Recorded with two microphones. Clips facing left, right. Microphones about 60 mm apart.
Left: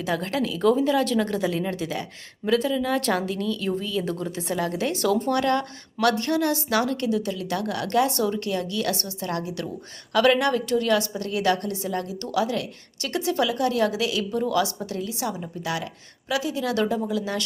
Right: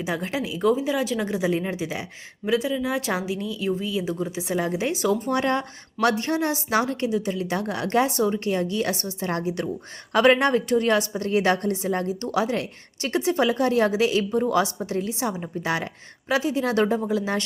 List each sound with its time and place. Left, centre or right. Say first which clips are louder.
0.0 s speech: left 2 dB; centre
4.5 s a woman's voice: right 1 dB; centre